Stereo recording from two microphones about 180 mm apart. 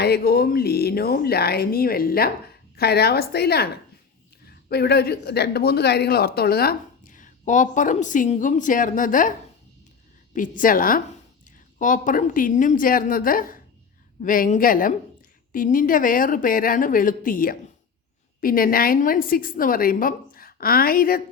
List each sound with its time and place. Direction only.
0.0 s a man's voice: 60° left (ahead or behind)
10.3 s a man's voice: 50° left (ahead or behind)